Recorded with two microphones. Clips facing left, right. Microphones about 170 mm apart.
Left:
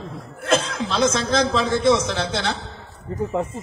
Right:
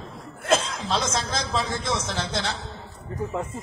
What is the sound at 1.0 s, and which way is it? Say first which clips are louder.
A man's voice: left 9 dB; 65° left (ahead or behind).